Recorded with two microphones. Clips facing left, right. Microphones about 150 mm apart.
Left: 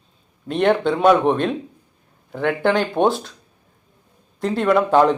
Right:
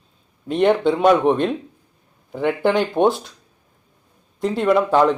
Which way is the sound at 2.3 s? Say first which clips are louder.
Even; 10° right (ahead or behind).